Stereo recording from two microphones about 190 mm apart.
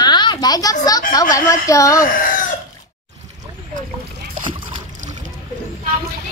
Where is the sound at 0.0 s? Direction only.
20° left (ahead or behind).